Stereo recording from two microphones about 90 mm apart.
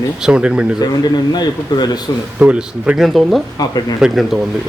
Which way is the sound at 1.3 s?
50° left (ahead or behind).